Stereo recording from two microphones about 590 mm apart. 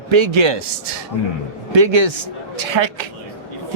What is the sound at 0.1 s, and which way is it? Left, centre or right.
Speech, right.